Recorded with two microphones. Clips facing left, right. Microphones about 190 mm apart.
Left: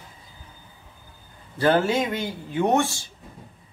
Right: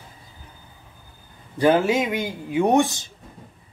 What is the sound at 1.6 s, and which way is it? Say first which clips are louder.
Speech: right 2 dB; 10° right (ahead or behind).